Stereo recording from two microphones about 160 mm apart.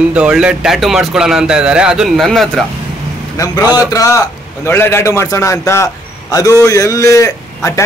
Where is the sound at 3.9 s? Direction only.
20° left (ahead or behind).